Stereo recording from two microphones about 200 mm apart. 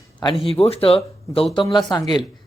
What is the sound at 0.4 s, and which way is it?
Speech, 30° left (ahead or behind).